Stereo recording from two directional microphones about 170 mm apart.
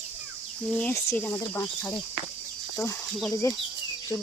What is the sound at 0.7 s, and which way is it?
Speech, 5° left (ahead or behind).